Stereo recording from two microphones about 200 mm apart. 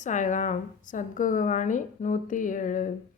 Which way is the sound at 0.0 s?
40° left (ahead or behind).